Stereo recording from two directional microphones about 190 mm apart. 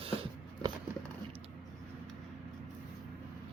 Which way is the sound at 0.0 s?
30° right (ahead or behind).